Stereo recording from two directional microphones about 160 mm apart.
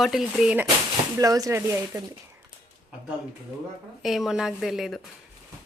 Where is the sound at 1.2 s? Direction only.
20° right (ahead or behind).